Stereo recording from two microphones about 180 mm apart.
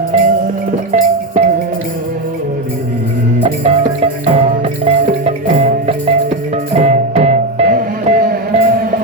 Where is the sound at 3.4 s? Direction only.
35° right (ahead or behind).